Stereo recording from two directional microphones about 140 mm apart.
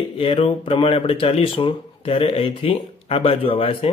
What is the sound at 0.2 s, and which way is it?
Speech, 40° left (ahead or behind).